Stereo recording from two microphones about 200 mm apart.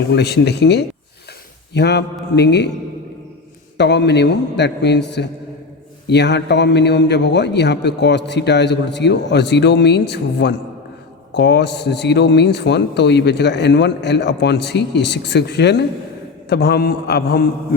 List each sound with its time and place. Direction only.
0.1 s a man's voice: 55° left (ahead or behind)
3.8 s a man's voice: 60° left (ahead or behind)